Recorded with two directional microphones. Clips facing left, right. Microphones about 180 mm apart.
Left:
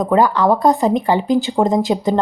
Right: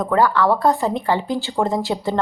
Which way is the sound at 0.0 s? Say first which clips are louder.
Left 3 dB; 20° left (ahead or behind).